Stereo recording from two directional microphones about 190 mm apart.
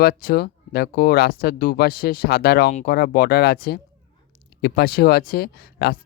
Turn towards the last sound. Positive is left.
turn(degrees=55)  # may be behind; listen again after turning